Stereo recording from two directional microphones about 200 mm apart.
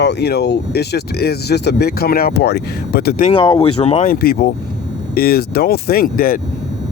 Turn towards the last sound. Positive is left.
turn(degrees=45)  # may be behind; listen again after turning